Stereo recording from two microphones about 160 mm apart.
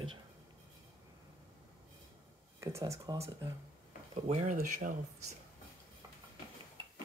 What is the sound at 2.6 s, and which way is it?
Speech, 20° right (ahead or behind).